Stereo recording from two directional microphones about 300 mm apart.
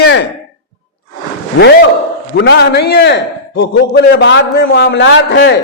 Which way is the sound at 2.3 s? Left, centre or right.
Left.